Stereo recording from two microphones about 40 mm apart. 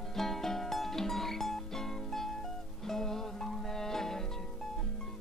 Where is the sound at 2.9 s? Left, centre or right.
Centre.